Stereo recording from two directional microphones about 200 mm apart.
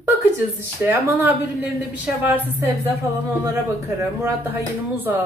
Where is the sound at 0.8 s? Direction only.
10° right (ahead or behind).